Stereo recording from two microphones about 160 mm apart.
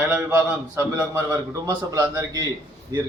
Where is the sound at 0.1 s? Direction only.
15° right (ahead or behind).